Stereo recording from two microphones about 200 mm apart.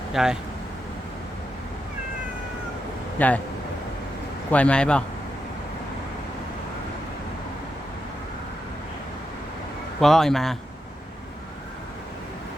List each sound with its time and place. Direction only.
0.1 s speech: centre (ahead or behind)
3.2 s speech: 5° left (ahead or behind)
4.5 s a man's voice: 5° left (ahead or behind)
10.0 s a man's voice: centre (ahead or behind)